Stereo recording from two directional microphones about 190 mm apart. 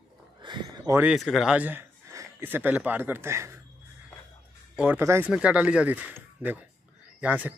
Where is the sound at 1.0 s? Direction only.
Centre (ahead or behind).